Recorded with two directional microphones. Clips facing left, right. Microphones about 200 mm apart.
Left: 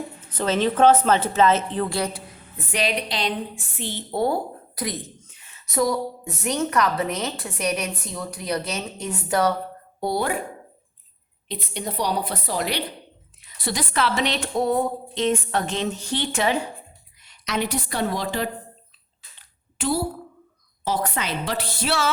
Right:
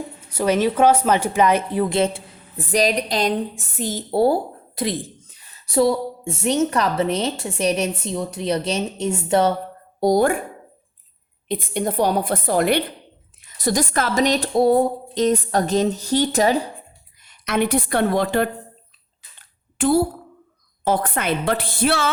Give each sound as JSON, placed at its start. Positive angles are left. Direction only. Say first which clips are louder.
{"t": 0.2, "sound": "a woman's voice", "louder": "right 4 dB", "side_deg": -10}
{"t": 2.0, "sound": "a sound", "louder": "right 7 dB", "side_deg": -25}
{"t": 2.7, "sound": "a woman's voice", "louder": "right 6 dB", "side_deg": -40}
{"t": 10.0, "sound": "a woman's voice", "louder": "right 8 dB", "side_deg": -45}
{"t": 11.4, "sound": "a woman's voice", "louder": "right 8 dB", "side_deg": -50}
{"t": 17.2, "sound": "a woman's voice", "louder": "right 5 dB", "side_deg": -55}
{"t": 19.4, "sound": "a sound", "louder": "right 8 dB", "side_deg": -50}
{"t": 20.8, "sound": "a woman's voice", "louder": "right 5 dB", "side_deg": -55}